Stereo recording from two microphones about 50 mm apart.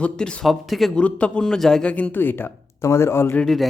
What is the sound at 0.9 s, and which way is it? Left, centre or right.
Speech, left.